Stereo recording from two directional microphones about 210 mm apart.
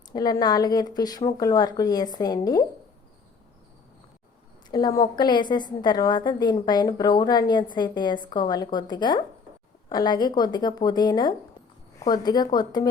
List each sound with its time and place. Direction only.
0.1 s a woman's voice: 20° left (ahead or behind)
4.7 s a woman's voice: 20° left (ahead or behind)